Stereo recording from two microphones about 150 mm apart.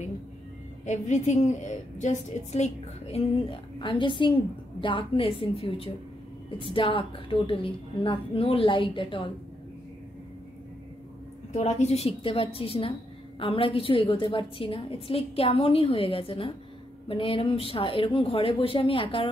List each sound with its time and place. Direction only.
0.8 s a woman's voice: 50° left (ahead or behind); by 9.3 s 35° left (ahead or behind)
11.5 s a woman's voice: 45° left (ahead or behind)